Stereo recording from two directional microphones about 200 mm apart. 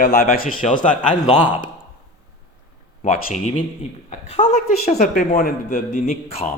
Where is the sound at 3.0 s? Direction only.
40° left (ahead or behind).